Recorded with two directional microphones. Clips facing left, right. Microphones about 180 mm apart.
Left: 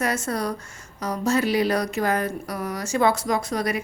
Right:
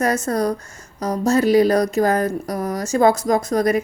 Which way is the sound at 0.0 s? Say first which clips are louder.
Right 6 dB; 45° right (ahead or behind).